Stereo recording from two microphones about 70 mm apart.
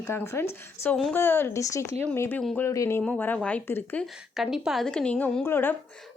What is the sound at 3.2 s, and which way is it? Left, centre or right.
Speech, left.